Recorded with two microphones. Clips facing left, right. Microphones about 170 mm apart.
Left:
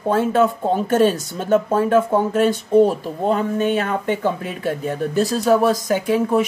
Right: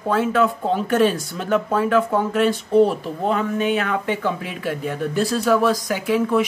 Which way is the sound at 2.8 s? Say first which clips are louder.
Left 2 dB; 45° left (ahead or behind).